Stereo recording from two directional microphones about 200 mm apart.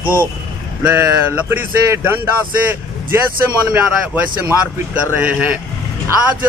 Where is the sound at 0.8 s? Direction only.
5° right (ahead or behind).